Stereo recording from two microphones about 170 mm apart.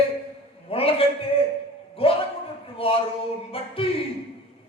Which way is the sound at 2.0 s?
35° left (ahead or behind).